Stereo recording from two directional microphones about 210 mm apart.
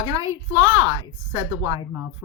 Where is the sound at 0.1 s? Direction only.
15° right (ahead or behind).